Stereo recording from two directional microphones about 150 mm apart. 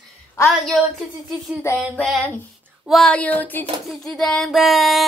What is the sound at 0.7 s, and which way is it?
Speech, centre (ahead or behind).